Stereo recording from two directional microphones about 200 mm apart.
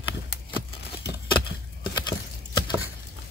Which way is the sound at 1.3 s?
25° left (ahead or behind).